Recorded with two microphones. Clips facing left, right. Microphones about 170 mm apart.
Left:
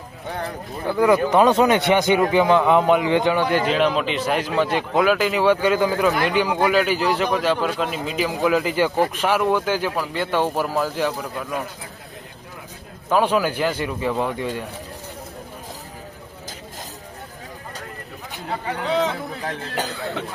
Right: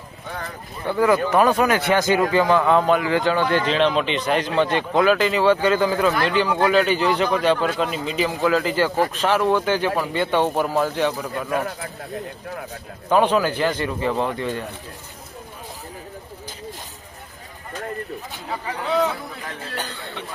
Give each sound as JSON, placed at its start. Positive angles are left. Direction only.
{"t": 0.9, "sound": "a man's voice", "side_deg": 15}
{"t": 13.1, "sound": "a man's voice", "side_deg": 5}
{"t": 19.5, "sound": "a man's voice", "side_deg": 90}